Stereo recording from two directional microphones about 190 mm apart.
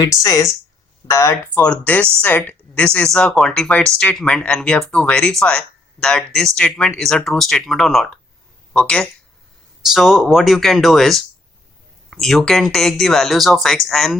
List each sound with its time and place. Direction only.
0.0 s speech: 20° left (ahead or behind); by 14.2 s centre (ahead or behind)